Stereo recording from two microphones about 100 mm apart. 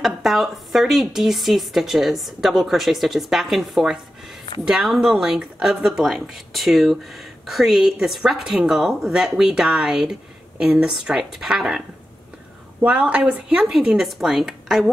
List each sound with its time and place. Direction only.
0.0 s a woman's voice: centre (ahead or behind)
12.8 s speech: 10° right (ahead or behind)